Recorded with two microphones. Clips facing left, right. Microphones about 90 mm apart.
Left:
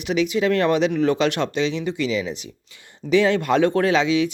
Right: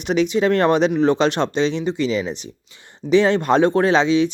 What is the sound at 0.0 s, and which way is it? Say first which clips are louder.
Speech: right 3 dB; 35° right (ahead or behind).